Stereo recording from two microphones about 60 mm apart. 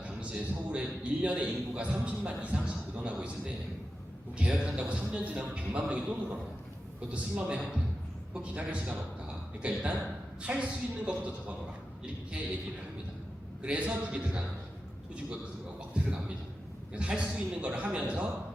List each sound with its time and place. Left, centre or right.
0.0 s a man's voice: right
13.6 s a man's voice: centre
16.9 s a man's voice: centre